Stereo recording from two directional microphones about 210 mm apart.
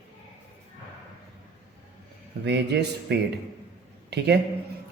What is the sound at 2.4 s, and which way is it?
A man's voice, 55° right (ahead or behind).